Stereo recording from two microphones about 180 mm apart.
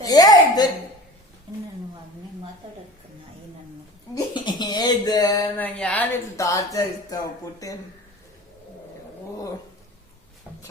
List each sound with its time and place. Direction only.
0.0 s a sound: 20° left (ahead or behind)
4.1 s speech: 25° left (ahead or behind)
5.5 s speech: 10° left (ahead or behind)